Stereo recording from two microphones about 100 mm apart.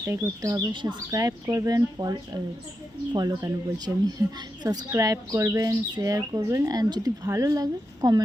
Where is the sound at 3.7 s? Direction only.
40° right (ahead or behind).